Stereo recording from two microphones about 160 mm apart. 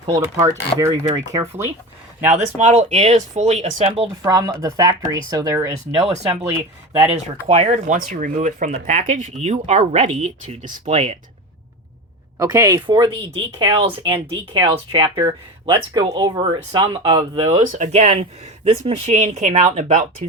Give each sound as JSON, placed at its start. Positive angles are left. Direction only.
{"t": 0.1, "sound": "speech", "side_deg": -20}
{"t": 2.6, "sound": "speech", "side_deg": -45}
{"t": 4.2, "sound": "speech", "side_deg": -20}
{"t": 7.1, "sound": "speech", "side_deg": -40}
{"t": 12.4, "sound": "speech", "side_deg": -20}